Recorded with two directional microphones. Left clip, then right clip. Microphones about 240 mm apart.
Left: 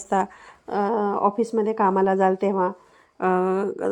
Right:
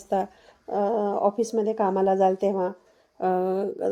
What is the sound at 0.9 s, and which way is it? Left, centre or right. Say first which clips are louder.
Speech: left 3 dB; centre.